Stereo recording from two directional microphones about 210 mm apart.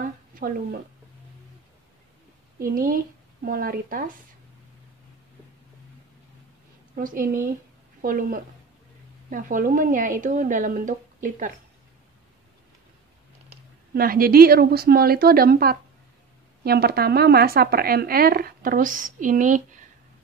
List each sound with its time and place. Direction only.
0.0 s a sound: 40° right (ahead or behind)
2.6 s speech: 45° right (ahead or behind)
7.0 s a woman's voice: 40° right (ahead or behind)
13.9 s speech: 45° right (ahead or behind)